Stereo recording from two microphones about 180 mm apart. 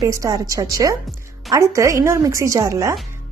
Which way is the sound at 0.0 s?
20° right (ahead or behind).